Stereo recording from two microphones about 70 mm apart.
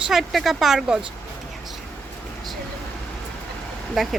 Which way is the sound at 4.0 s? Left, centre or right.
Centre.